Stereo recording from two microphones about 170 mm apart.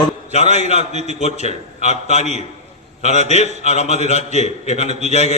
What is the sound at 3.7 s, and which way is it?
Speech, 40° left (ahead or behind).